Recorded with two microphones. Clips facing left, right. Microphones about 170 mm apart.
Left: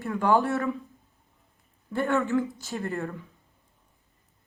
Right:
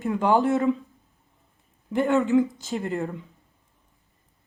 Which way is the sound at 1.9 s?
15° right (ahead or behind).